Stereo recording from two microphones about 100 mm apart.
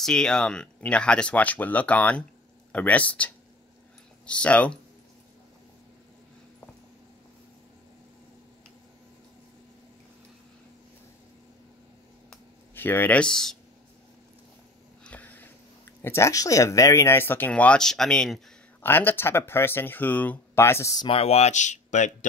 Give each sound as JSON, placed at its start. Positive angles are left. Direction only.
{"t": 0.0, "sound": "speech", "side_deg": 5}
{"t": 4.3, "sound": "speech", "side_deg": 15}
{"t": 12.7, "sound": "speech", "side_deg": 20}
{"t": 15.0, "sound": "a sound", "side_deg": 15}
{"t": 16.0, "sound": "speech", "side_deg": 25}
{"t": 18.8, "sound": "speech", "side_deg": 20}
{"t": 21.1, "sound": "speech", "side_deg": 90}